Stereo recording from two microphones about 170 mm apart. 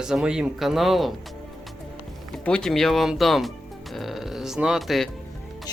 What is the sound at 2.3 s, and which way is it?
Speech, 5° left (ahead or behind).